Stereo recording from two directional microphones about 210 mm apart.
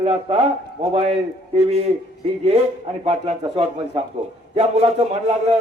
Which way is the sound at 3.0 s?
30° right (ahead or behind).